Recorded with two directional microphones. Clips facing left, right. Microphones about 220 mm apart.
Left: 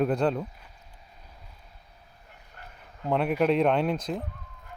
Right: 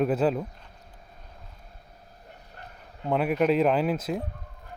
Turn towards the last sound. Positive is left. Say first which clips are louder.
# right 1 dB
turn(degrees=-5)  # may be behind; listen again after turning